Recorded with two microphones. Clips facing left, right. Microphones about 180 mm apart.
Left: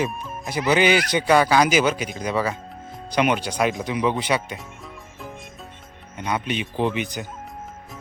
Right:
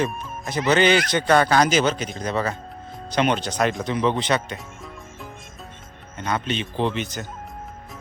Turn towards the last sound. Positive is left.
turn(degrees=15)  # may be behind; listen again after turning